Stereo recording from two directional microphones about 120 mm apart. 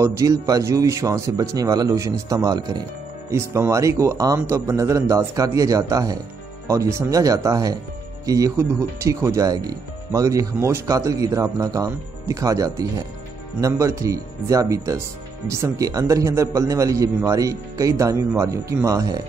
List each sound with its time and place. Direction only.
0.0 s speech: 25° right (ahead or behind)
3.3 s speech: 25° right (ahead or behind)